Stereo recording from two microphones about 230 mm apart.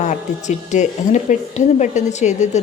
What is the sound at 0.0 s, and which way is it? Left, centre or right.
Speech, left.